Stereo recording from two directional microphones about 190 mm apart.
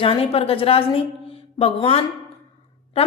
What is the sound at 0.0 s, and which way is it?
A woman's voice, 30° left (ahead or behind).